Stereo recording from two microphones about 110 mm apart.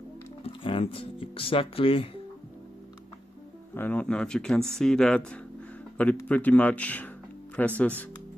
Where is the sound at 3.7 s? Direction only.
15° left (ahead or behind).